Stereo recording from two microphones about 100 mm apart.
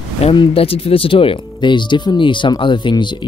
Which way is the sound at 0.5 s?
75° left (ahead or behind).